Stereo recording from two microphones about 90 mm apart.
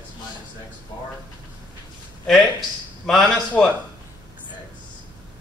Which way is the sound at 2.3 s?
5° left (ahead or behind).